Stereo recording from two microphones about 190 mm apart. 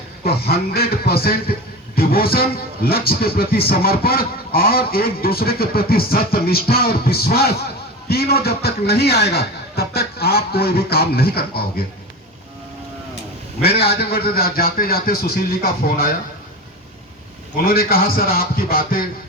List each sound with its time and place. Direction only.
0.3 s a man's voice: 55° left (ahead or behind)
13.6 s speech: 55° left (ahead or behind)
17.6 s speech: 50° left (ahead or behind)